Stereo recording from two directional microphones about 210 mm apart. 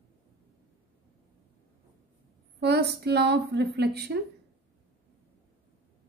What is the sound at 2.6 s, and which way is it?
A woman's voice, 50° right (ahead or behind).